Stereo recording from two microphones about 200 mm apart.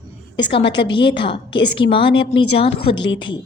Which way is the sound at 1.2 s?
25° left (ahead or behind).